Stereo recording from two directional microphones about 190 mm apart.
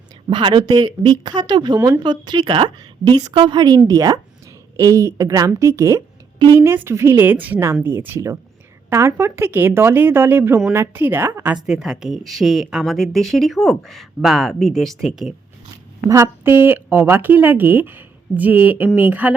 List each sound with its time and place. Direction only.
0.3 s a woman's voice: 25° right (ahead or behind); by 15.4 s centre (ahead or behind)
16.0 s a woman's voice: 15° right (ahead or behind)